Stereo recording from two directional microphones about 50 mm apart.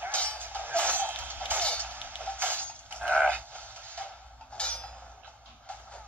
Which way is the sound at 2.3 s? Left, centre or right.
Right.